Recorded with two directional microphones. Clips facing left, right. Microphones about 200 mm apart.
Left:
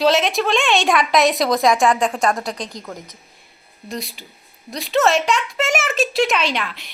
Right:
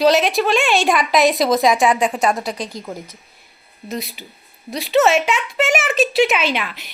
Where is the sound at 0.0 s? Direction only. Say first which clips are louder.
Right 2 dB; centre (ahead or behind).